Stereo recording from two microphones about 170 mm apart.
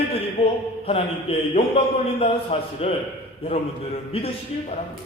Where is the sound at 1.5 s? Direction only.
35° left (ahead or behind).